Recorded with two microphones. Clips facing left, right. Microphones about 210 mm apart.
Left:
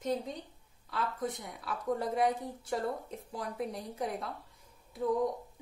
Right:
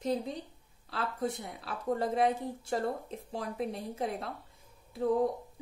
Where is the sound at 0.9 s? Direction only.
30° right (ahead or behind).